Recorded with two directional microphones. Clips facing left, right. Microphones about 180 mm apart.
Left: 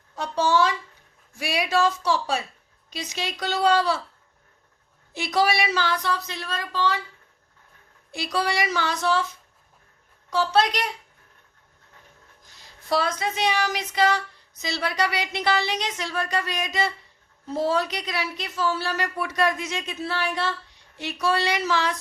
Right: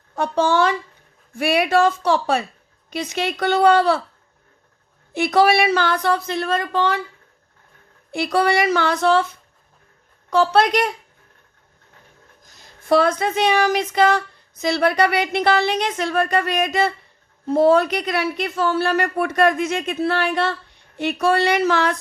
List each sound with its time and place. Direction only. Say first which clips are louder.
0.2 s a sound: right 4 dB; 55° right (ahead or behind)
1.3 s a woman's voice: right 7 dB; 55° right (ahead or behind)
5.1 s a woman's voice: right 7 dB; 55° right (ahead or behind)
8.1 s a woman's voice: right 8 dB; 55° right (ahead or behind)
10.2 s a woman's voice: right 5 dB; 55° right (ahead or behind)
12.4 s a woman's voice: right 3 dB; 45° right (ahead or behind)